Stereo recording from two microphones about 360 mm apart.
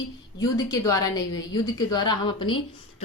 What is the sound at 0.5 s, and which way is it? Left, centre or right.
Speech, centre.